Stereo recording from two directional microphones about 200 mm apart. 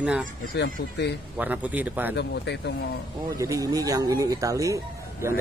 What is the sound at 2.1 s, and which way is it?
Speech, 55° left (ahead or behind).